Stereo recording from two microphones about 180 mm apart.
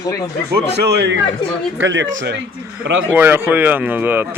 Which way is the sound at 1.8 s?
90° right.